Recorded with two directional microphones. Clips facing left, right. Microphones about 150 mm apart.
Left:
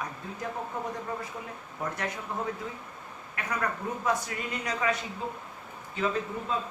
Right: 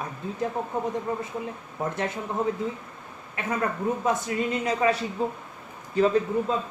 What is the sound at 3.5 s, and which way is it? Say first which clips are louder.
Speech: right 6 dB; 25° right (ahead or behind).